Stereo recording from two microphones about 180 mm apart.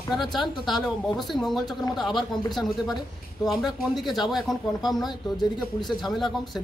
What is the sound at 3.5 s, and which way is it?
Speech, centre (ahead or behind).